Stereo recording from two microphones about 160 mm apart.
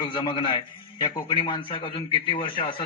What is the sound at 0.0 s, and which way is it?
A man's voice, 30° left (ahead or behind).